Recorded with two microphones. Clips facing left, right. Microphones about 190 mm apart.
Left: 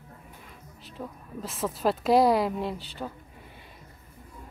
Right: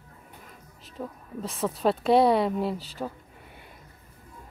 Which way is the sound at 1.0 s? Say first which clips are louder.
Right 2 dB; centre (ahead or behind).